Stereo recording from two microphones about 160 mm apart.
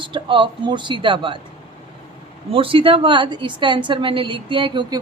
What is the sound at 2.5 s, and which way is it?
A woman's voice, 35° right (ahead or behind).